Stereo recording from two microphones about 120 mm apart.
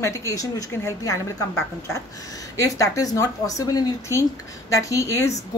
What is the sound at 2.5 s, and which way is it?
A woman's voice, 30° left (ahead or behind).